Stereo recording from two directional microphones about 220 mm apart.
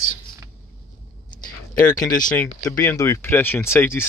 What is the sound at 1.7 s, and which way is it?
Speech, 15° left (ahead or behind).